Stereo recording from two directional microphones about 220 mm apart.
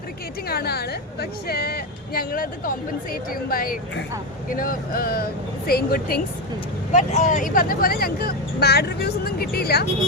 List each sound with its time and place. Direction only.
0.4 s a woman's voice: 45° left (ahead or behind)